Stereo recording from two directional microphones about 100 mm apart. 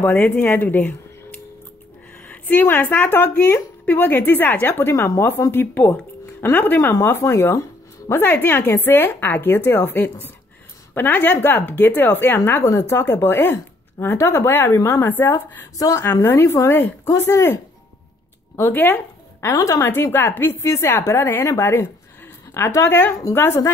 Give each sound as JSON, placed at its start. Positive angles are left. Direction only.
{"t": 0.0, "sound": "a woman's voice", "side_deg": 15}
{"t": 2.2, "sound": "a woman's voice", "side_deg": 15}
{"t": 18.6, "sound": "a woman's voice", "side_deg": 20}
{"t": 19.4, "sound": "a woman's voice", "side_deg": 30}